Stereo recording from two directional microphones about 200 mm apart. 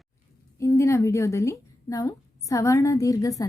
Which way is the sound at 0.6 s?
15° left (ahead or behind).